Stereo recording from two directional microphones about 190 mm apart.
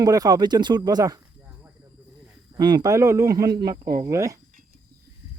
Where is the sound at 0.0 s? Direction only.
20° right (ahead or behind).